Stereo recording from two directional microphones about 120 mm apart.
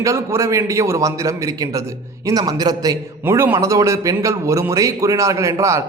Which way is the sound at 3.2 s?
20° right (ahead or behind).